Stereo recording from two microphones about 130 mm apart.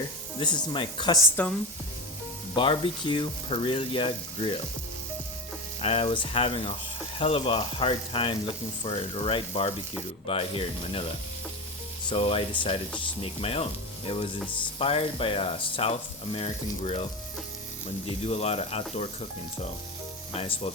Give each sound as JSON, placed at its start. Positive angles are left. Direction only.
{"t": 0.3, "sound": "speech", "side_deg": 35}
{"t": 2.6, "sound": "speech", "side_deg": 40}
{"t": 5.8, "sound": "speech", "side_deg": 45}
{"t": 12.0, "sound": "speech", "side_deg": 45}
{"t": 18.0, "sound": "speech", "side_deg": 50}
{"t": 20.3, "sound": "speech", "side_deg": 50}